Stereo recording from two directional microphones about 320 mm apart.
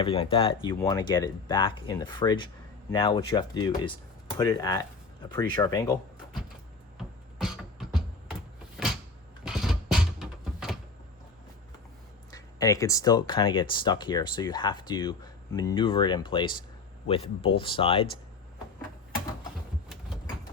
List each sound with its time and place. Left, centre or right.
0.0 s speech: centre
7.3 s beatboxing: centre
9.4 s a sound: centre
12.3 s speech: centre